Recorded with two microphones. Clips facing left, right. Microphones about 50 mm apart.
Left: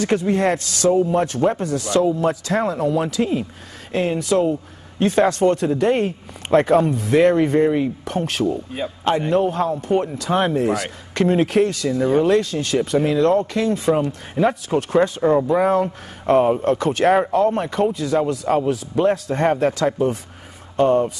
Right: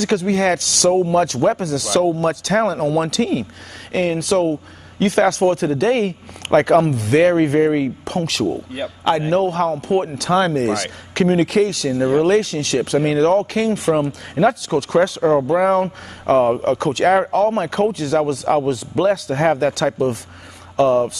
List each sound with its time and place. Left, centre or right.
0.0 s speech: right
3.9 s speech: right
10.1 s speech: right
15.6 s speech: right
18.7 s speech: right
20.7 s speech: right